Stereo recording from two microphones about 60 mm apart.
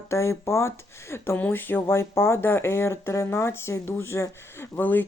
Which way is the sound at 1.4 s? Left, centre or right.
Left.